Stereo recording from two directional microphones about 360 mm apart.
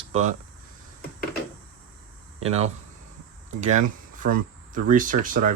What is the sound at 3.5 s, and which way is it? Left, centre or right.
Speech, centre.